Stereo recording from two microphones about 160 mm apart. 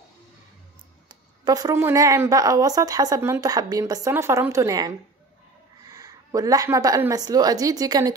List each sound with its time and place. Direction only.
1.0 s a woman's voice: 25° right (ahead or behind)